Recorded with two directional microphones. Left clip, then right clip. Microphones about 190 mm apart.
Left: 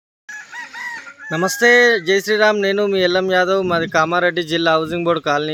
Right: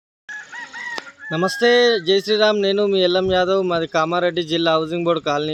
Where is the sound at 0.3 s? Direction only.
40° right (ahead or behind).